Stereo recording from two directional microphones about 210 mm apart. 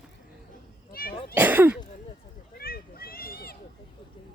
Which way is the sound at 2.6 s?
45° left (ahead or behind).